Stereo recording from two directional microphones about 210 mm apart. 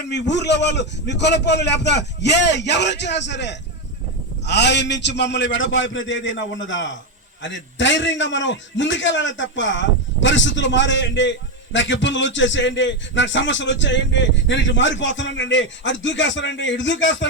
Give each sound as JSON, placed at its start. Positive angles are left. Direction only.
{"t": 0.1, "sound": "a man's voice", "side_deg": 55}